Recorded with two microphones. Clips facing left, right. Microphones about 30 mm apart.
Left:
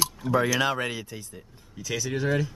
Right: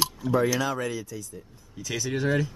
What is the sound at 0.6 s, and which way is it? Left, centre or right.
Speech, left.